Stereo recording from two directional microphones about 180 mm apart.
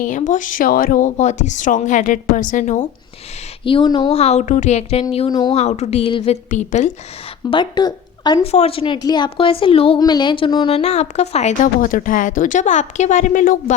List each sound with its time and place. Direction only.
0.0 s a woman's voice: 45° left (ahead or behind)
3.6 s speech: 30° left (ahead or behind)
4.1 s a woman's voice: 35° left (ahead or behind)
5.5 s a woman's voice: 40° left (ahead or behind)
7.5 s a woman's voice: 25° left (ahead or behind); by 13.7 s 45° left (ahead or behind)